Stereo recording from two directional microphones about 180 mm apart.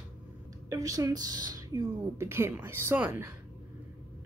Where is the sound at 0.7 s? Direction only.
20° right (ahead or behind).